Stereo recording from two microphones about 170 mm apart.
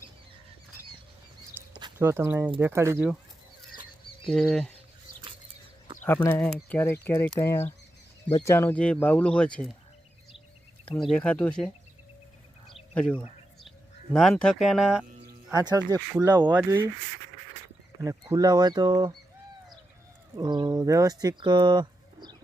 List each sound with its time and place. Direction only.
2.0 s speech: 15° right (ahead or behind)
4.3 s speech: 5° left (ahead or behind)
6.2 s speech: 10° left (ahead or behind)
10.9 s speech: 5° left (ahead or behind)
12.9 s speech: 10° left (ahead or behind)
15.5 s speech: 25° right (ahead or behind)
16.5 s speech: 15° right (ahead or behind)
18.0 s speech: 15° right (ahead or behind)
20.3 s speech: 25° right (ahead or behind)